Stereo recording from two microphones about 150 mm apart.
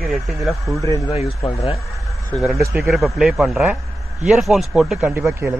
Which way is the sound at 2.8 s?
Centre (ahead or behind).